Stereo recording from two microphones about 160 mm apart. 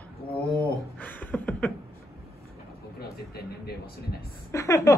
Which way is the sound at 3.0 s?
75° left (ahead or behind).